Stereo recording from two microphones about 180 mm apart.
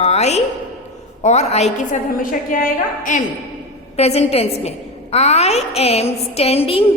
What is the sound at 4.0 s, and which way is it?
A woman's voice, 35° left (ahead or behind).